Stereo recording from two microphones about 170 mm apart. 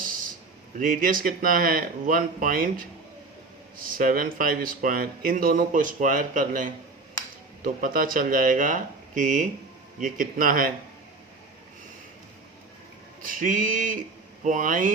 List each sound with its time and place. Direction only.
0.8 s speech: 55° right (ahead or behind)
3.9 s speech: 55° right (ahead or behind)
13.2 s speech: 50° right (ahead or behind)